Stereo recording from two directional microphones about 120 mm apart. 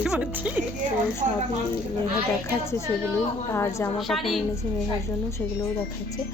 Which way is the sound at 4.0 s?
Centre (ahead or behind).